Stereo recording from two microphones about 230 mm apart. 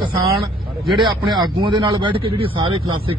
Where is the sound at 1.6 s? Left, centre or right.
Right.